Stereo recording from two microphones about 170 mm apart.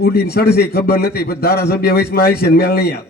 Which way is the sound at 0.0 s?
70° left (ahead or behind).